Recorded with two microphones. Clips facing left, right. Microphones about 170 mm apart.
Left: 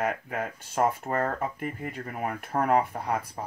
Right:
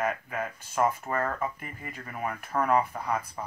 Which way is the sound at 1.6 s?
50° left (ahead or behind).